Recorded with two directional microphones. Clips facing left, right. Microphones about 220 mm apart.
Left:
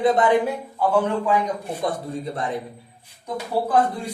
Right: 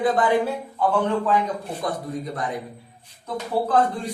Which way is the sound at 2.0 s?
25° left (ahead or behind).